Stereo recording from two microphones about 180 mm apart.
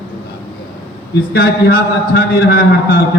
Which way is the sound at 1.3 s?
60° left (ahead or behind).